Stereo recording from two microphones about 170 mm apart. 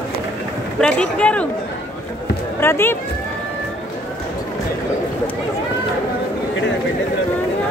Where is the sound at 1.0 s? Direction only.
5° left (ahead or behind).